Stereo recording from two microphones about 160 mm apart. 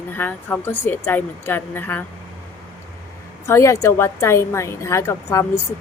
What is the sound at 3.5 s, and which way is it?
A woman's voice, 20° left (ahead or behind).